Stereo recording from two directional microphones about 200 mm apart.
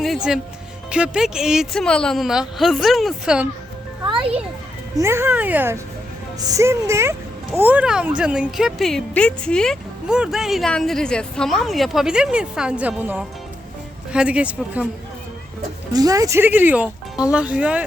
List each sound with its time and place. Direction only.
0.9 s speech: 5° right (ahead or behind)
4.0 s music: 25° right (ahead or behind)
4.9 s speech: 15° right (ahead or behind)
15.9 s speech: 20° right (ahead or behind)